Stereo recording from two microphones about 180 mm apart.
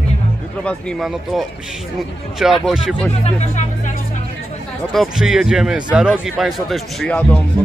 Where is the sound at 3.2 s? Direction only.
35° left (ahead or behind).